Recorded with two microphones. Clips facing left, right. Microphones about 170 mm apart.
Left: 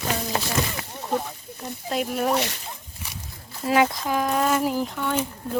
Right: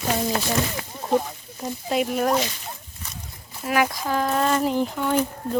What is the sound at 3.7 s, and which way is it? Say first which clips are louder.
Speech: left 2 dB; 25° left (ahead or behind).